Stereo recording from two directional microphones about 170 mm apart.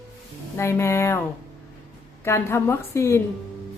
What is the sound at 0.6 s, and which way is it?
Speech, 15° left (ahead or behind).